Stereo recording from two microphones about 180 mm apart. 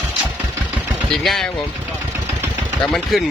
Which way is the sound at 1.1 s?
Centre (ahead or behind).